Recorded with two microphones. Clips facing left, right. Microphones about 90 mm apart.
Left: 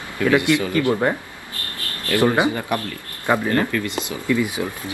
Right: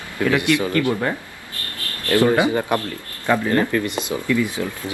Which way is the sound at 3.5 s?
25° right (ahead or behind).